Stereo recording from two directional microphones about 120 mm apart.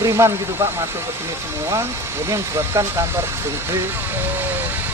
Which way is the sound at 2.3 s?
20° right (ahead or behind).